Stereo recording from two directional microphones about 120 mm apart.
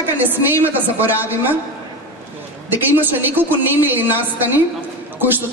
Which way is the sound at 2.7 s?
15° right (ahead or behind).